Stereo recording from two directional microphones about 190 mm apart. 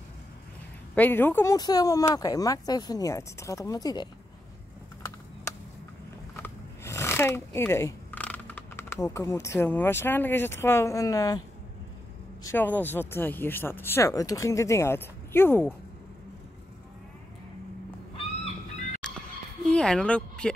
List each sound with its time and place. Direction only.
0.9 s speech: 10° left (ahead or behind)
6.3 s a sound: 15° left (ahead or behind)
9.6 s speech: 10° left (ahead or behind)
12.4 s speech: 10° left (ahead or behind)
18.1 s fowl: 35° left (ahead or behind)
19.7 s speech: 5° left (ahead or behind)